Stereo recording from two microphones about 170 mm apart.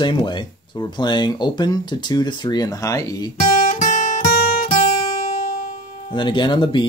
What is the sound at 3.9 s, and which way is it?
Music, 45° left (ahead or behind).